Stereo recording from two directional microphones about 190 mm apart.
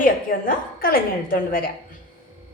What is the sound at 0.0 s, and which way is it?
A woman's voice, 45° left (ahead or behind).